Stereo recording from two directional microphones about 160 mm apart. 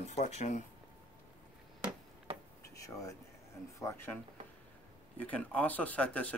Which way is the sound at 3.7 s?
15° left (ahead or behind).